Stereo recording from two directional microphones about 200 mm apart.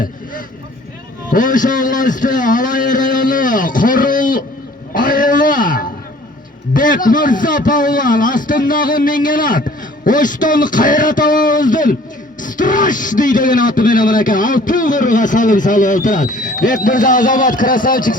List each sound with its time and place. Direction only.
1.3 s speech: 40° left (ahead or behind)
4.9 s a sound: 45° left (ahead or behind)
6.7 s a man's voice: 45° left (ahead or behind)